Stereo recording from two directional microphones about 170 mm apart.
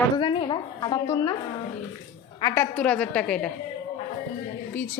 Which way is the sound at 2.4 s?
20° left (ahead or behind).